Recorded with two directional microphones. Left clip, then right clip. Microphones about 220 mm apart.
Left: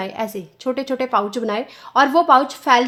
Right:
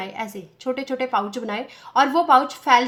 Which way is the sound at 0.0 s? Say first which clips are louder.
Left 5 dB; 35° left (ahead or behind).